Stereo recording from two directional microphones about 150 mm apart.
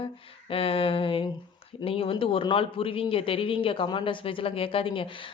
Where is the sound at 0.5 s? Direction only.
40° left (ahead or behind).